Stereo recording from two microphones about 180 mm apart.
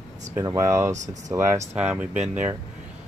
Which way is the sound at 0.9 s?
40° right (ahead or behind).